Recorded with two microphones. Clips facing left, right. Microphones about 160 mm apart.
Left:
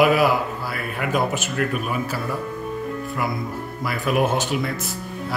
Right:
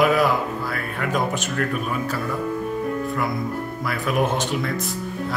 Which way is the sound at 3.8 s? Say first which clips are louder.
Left 2 dB; centre (ahead or behind).